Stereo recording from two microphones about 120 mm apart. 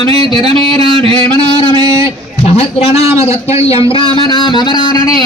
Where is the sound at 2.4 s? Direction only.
60° left (ahead or behind).